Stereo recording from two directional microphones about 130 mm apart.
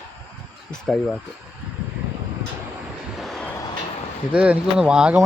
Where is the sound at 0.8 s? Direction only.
5° left (ahead or behind).